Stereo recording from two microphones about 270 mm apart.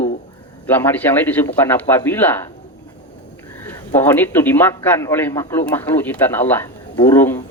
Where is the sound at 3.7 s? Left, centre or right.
Centre.